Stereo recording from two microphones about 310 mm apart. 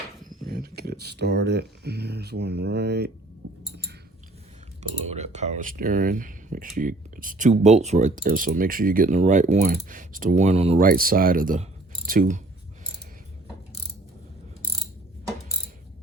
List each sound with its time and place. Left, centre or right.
0.3 s speech: right
4.8 s speech: right